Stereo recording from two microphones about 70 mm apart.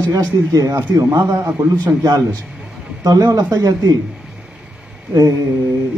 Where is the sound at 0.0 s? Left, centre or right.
Right.